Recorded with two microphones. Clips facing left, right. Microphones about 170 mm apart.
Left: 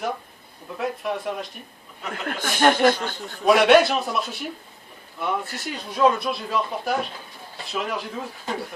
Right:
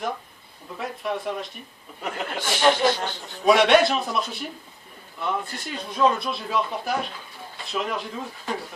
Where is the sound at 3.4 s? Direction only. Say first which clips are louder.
Left 1 dB; centre (ahead or behind).